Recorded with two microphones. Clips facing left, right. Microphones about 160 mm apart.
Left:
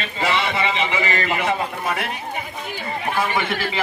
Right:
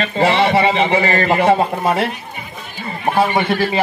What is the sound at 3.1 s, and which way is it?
Speech, 30° right (ahead or behind).